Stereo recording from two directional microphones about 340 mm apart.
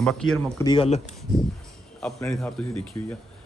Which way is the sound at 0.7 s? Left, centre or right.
Centre.